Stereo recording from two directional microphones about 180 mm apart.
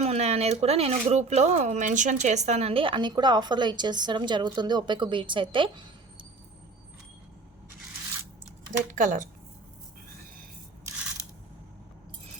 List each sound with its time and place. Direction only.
0.0 s speech: 35° right (ahead or behind)
9.0 s speech: 45° right (ahead or behind)